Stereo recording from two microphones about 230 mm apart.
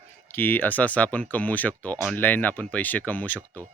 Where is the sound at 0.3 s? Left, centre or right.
Centre.